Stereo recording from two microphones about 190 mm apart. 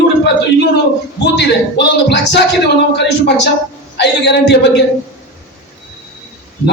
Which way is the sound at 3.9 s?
65° left (ahead or behind).